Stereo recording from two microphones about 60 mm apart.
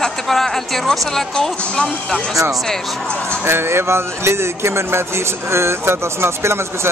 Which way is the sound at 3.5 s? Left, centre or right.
Right.